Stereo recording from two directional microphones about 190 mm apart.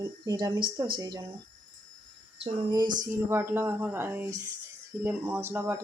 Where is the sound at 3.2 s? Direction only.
10° right (ahead or behind).